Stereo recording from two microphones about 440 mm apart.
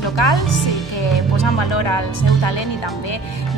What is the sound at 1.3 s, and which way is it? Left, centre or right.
A woman's voice, left.